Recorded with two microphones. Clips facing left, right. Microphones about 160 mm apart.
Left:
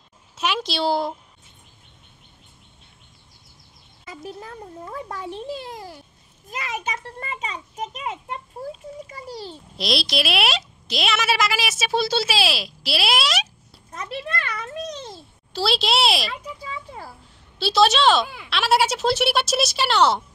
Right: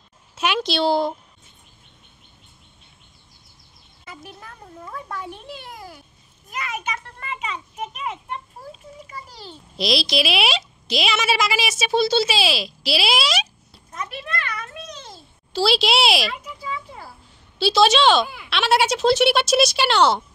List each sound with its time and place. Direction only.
0.4 s a woman's voice: centre (ahead or behind)
4.0 s a child's voice: 35° left (ahead or behind)
9.8 s a woman's voice: centre (ahead or behind)
13.9 s a sound: 30° left (ahead or behind)
15.5 s a woman's voice: centre (ahead or behind)
17.6 s a woman's voice: centre (ahead or behind)